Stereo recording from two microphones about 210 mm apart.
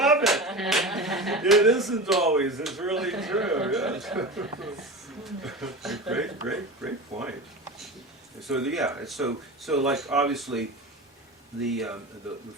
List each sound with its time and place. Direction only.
0.0 s speech: centre (ahead or behind)
7.1 s speech: 30° right (ahead or behind)
8.4 s speech: centre (ahead or behind)
11.6 s speech: centre (ahead or behind)